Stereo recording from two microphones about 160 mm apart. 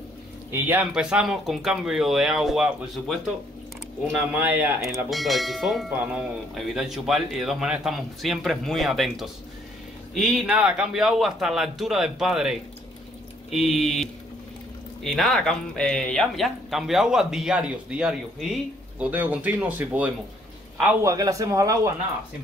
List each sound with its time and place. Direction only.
0.5 s speech: 10° right (ahead or behind)
4.4 s speech: 10° right (ahead or behind)
4.8 s speech: centre (ahead or behind)
15.0 s speech: centre (ahead or behind); by 21.9 s 20° right (ahead or behind)